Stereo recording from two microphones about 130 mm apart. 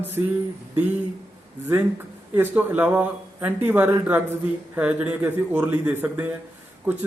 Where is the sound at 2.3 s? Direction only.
15° right (ahead or behind).